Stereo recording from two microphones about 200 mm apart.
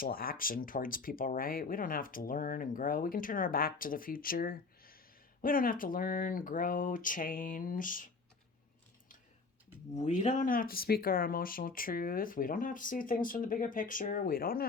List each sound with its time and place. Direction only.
0.0 s speech: 45° left (ahead or behind)
9.9 s speech: 35° left (ahead or behind)